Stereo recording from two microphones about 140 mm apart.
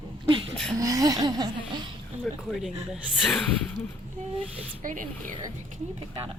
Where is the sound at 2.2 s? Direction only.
Centre (ahead or behind).